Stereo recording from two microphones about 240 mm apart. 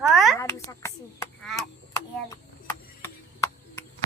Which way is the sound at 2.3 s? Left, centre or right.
Centre.